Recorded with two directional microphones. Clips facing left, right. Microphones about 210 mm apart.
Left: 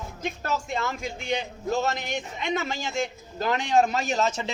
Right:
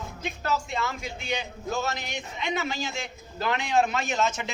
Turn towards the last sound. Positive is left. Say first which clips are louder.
# left 2 dB
turn(degrees=35)  # may be behind; listen again after turning